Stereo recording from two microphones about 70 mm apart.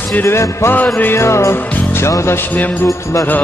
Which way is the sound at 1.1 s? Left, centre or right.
Left.